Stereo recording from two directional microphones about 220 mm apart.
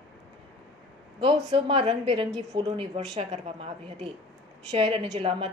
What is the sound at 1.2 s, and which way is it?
A woman's voice, 20° right (ahead or behind).